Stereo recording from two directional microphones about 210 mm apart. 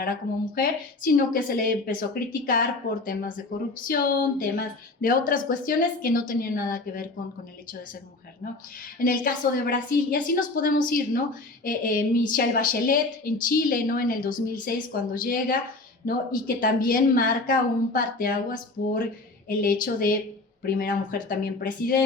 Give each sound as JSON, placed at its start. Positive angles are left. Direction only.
{"t": 0.0, "sound": "a woman's voice", "side_deg": 40}
{"t": 9.0, "sound": "a woman's voice", "side_deg": 40}